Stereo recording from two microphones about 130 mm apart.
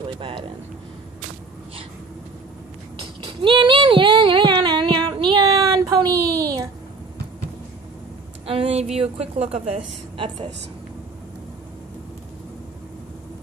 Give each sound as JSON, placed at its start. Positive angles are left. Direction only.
{"t": 0.2, "sound": "speech", "side_deg": -40}
{"t": 3.3, "sound": "child singing", "side_deg": -40}
{"t": 8.5, "sound": "a woman's voice", "side_deg": -50}